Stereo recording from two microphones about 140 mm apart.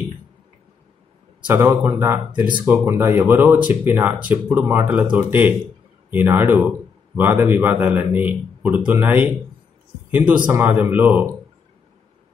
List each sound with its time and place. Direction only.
1.5 s speech: 15° right (ahead or behind)